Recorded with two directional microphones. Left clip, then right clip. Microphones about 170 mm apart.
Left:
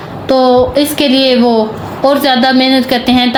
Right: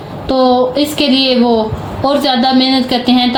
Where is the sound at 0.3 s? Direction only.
40° left (ahead or behind).